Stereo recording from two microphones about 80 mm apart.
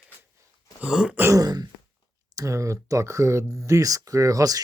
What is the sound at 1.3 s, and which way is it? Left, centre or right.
Throat clearing, right.